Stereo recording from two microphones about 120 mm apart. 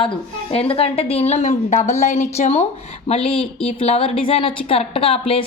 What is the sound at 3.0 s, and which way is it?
A woman's voice, 55° left (ahead or behind).